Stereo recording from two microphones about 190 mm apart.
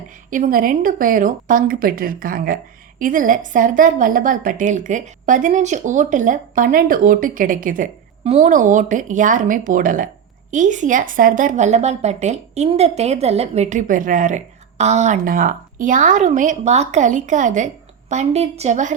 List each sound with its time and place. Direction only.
0.3 s a woman's voice: 45° right (ahead or behind)
8.2 s a woman's voice: 35° right (ahead or behind)